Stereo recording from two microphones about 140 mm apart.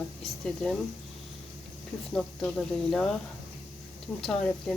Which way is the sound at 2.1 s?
5° left (ahead or behind).